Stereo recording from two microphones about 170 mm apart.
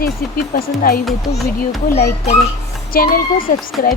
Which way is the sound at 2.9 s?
55° left (ahead or behind).